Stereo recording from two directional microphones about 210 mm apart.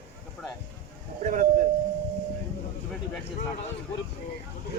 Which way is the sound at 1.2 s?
35° right (ahead or behind).